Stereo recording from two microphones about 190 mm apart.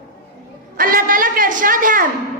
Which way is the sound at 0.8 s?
45° right (ahead or behind).